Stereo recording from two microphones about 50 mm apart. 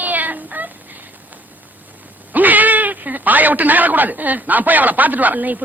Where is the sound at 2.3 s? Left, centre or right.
Right.